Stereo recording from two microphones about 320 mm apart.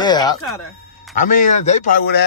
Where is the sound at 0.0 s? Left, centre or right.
Centre.